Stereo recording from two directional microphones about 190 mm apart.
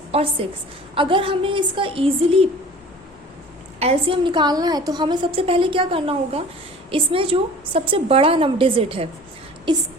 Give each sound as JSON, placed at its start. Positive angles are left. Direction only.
{"t": 0.1, "sound": "a woman's voice", "side_deg": -30}
{"t": 3.8, "sound": "a woman's voice", "side_deg": -30}